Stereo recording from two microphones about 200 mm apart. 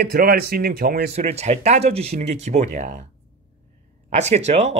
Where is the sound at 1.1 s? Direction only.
35° right (ahead or behind).